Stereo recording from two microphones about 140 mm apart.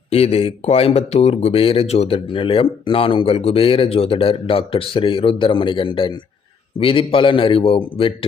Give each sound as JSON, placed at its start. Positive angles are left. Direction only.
{"t": 0.1, "sound": "speech", "side_deg": 45}